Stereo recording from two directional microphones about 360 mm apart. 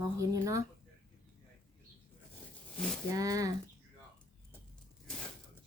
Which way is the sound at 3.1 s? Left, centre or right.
Centre.